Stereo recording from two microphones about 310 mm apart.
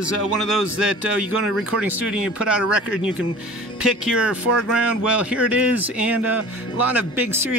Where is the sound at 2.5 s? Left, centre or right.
Centre.